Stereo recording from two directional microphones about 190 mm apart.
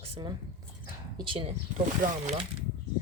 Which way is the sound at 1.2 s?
30° right (ahead or behind).